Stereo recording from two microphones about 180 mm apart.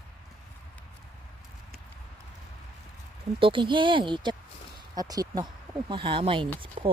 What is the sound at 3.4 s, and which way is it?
A child's voice, 30° right (ahead or behind).